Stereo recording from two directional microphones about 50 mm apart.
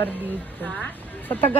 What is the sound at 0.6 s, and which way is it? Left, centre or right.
Speech, left.